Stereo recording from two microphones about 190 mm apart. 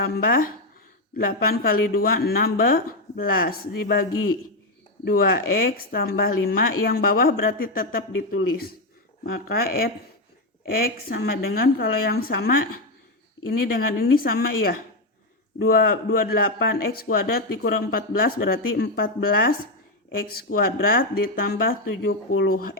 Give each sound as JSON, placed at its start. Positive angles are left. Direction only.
{"t": 0.0, "sound": "speech", "side_deg": 55}